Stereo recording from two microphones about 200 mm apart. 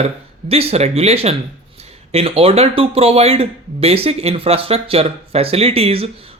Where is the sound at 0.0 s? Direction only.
30° right (ahead or behind).